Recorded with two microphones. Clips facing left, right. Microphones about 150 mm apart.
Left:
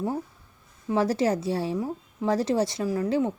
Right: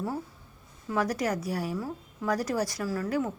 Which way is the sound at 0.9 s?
25° left (ahead or behind).